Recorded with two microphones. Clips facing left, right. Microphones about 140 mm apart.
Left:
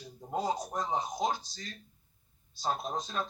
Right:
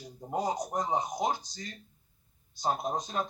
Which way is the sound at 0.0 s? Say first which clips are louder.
Right 2 dB; 20° right (ahead or behind).